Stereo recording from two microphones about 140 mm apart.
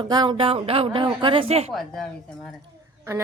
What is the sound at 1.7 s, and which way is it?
Speech, centre (ahead or behind).